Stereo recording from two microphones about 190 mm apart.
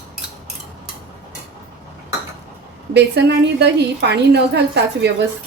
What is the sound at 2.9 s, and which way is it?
A woman's voice, 65° right (ahead or behind).